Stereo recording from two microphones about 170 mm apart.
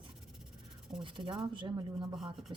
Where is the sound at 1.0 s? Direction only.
30° right (ahead or behind).